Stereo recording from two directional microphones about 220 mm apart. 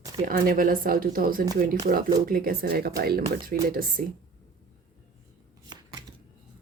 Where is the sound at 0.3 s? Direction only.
40° right (ahead or behind).